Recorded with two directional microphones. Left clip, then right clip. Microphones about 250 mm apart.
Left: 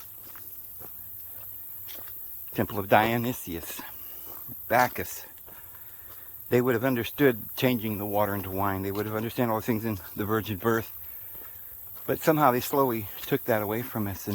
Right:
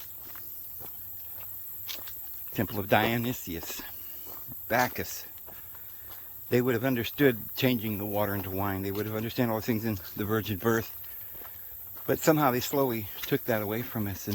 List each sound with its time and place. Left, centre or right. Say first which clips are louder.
2.5 s speech: left 4 dB; centre
6.5 s speech: left 2 dB; centre
12.0 s speech: left 2 dB; centre